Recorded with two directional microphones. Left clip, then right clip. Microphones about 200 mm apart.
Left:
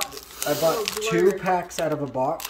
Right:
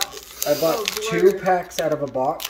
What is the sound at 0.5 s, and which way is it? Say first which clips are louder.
Speech: right 2 dB; 25° left (ahead or behind).